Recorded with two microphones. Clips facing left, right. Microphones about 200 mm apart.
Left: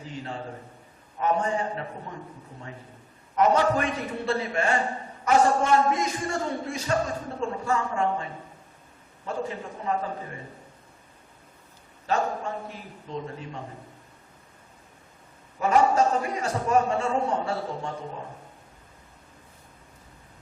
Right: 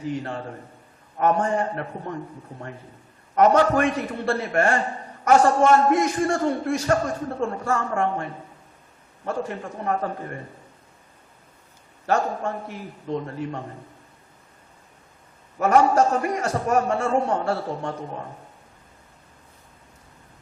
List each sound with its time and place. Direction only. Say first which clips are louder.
0.0 s a man's voice: right 6 dB; 60° right (ahead or behind)
3.3 s a man's voice: right 4 dB; 60° right (ahead or behind)
12.0 s a man's voice: right 3 dB; 55° right (ahead or behind)
15.5 s a man's voice: right 3 dB; 60° right (ahead or behind)